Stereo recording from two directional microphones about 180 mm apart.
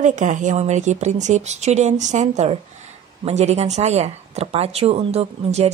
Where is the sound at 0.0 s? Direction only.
45° right (ahead or behind).